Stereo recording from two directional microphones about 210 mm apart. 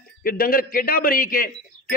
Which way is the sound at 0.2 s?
45° left (ahead or behind).